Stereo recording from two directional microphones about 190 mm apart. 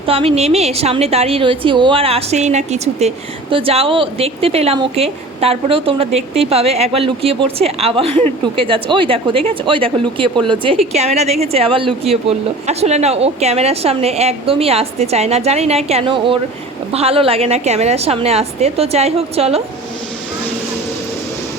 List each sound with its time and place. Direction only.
0.0 s a woman's voice: 30° right (ahead or behind)